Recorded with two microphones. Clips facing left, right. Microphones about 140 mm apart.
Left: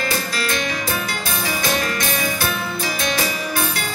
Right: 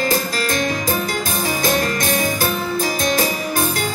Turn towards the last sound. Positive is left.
turn(degrees=-45)  # may be behind; listen again after turning